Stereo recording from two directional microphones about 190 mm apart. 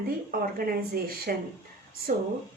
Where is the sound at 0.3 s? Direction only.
50° right (ahead or behind).